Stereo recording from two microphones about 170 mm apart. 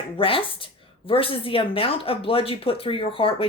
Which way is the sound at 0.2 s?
30° left (ahead or behind).